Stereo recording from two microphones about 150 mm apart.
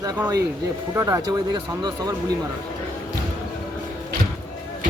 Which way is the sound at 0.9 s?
20° right (ahead or behind).